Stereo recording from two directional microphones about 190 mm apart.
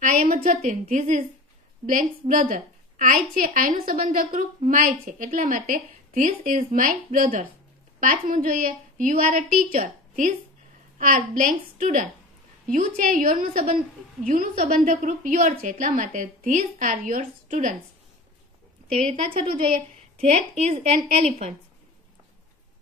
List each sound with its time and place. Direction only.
0.0 s a sound: 45° right (ahead or behind)
0.7 s a woman's voice: 40° right (ahead or behind)
18.9 s a woman's voice: 30° right (ahead or behind)